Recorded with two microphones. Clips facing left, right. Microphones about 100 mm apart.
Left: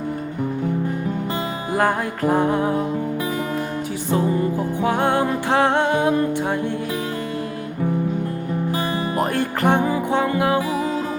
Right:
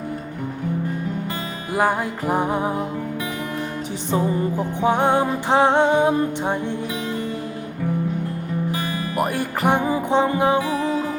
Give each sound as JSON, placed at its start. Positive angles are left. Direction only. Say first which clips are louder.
{"t": 1.7, "sound": "music", "louder": "even", "side_deg": -10}
{"t": 4.1, "sound": "music", "louder": "left 1 dB", "side_deg": -20}
{"t": 9.2, "sound": "music", "louder": "even", "side_deg": -10}
{"t": 10.7, "sound": "music", "louder": "even", "side_deg": 10}